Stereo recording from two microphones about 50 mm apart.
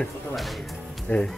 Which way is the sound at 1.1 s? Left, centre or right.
Left.